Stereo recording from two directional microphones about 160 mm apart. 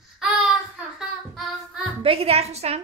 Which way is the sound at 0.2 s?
5° right (ahead or behind).